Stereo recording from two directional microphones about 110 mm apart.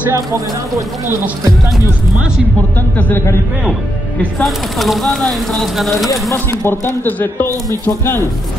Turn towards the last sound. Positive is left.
turn(degrees=20)  # may be behind; listen again after turning